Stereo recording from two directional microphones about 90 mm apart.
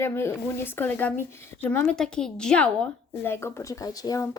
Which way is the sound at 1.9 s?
10° left (ahead or behind).